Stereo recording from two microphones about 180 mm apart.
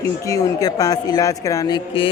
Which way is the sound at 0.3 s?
20° left (ahead or behind).